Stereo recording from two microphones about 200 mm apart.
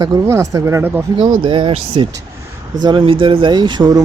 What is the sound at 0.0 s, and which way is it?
Speech, 15° right (ahead or behind).